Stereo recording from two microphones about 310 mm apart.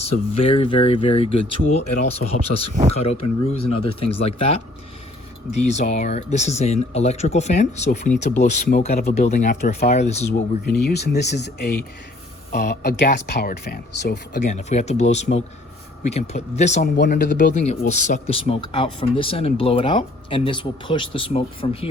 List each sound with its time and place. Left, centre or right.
0.0 s speech: centre